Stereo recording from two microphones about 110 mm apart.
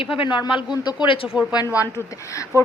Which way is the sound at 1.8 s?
30° left (ahead or behind).